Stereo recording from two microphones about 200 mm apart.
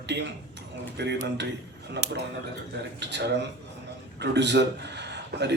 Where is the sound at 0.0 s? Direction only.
60° right (ahead or behind).